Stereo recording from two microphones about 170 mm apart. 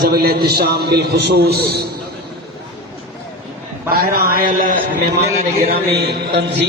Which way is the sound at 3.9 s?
60° right (ahead or behind).